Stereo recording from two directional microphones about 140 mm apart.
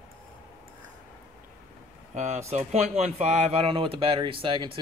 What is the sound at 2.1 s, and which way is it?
Speech, 55° right (ahead or behind).